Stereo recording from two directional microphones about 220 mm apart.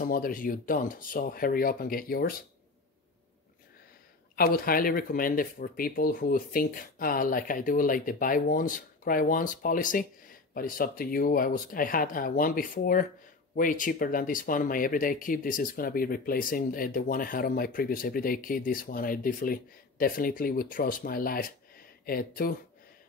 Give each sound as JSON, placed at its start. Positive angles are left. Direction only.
{"t": 0.0, "sound": "speech", "side_deg": 40}
{"t": 4.4, "sound": "speech", "side_deg": 40}